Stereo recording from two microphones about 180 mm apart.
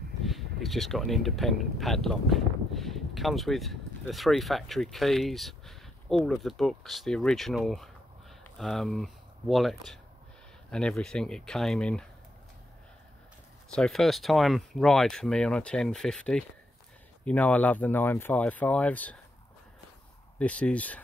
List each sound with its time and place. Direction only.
0.2 s speech: centre (ahead or behind)
13.7 s speech: 5° left (ahead or behind)
20.3 s speech: 5° left (ahead or behind)